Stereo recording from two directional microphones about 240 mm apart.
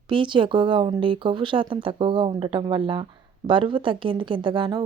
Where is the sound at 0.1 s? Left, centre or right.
Centre.